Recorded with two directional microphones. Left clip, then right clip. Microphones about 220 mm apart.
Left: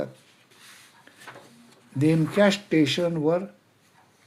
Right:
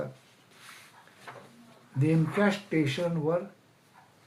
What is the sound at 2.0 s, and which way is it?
Speech, 40° left (ahead or behind).